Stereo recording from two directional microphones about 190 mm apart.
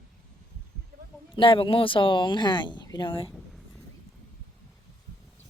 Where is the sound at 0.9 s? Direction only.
55° right (ahead or behind).